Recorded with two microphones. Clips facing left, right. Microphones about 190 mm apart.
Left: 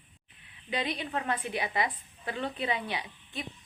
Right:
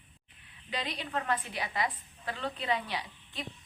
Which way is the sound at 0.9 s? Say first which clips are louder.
Even; 15° left (ahead or behind).